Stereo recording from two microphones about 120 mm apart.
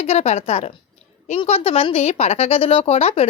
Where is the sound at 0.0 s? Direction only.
65° left (ahead or behind).